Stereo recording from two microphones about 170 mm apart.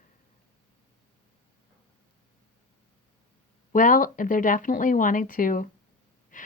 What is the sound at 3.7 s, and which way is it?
Speech, 50° left (ahead or behind).